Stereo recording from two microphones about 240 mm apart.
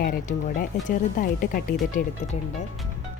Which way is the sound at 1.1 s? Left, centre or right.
Left.